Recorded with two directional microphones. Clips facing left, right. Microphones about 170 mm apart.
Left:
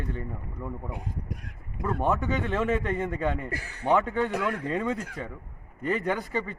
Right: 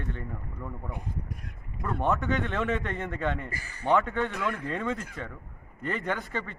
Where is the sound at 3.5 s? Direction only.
70° left (ahead or behind).